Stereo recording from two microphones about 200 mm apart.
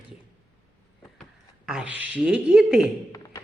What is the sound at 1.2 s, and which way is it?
Speech, 5° right (ahead or behind).